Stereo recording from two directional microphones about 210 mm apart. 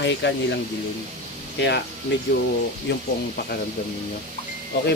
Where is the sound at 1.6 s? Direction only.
55° left (ahead or behind).